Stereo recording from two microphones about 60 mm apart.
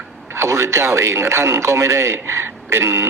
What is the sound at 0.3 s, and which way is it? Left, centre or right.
A man's voice, right.